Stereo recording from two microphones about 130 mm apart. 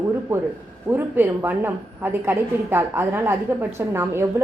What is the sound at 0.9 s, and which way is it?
A woman's voice, 15° right (ahead or behind).